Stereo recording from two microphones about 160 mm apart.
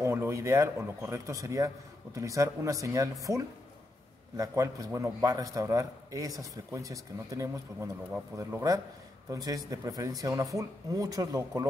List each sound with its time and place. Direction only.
0.0 s a man's voice: 15° right (ahead or behind)